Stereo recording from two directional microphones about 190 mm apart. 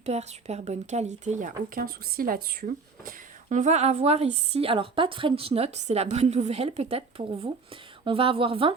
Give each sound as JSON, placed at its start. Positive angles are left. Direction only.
{"t": 0.0, "sound": "a woman's voice", "side_deg": -35}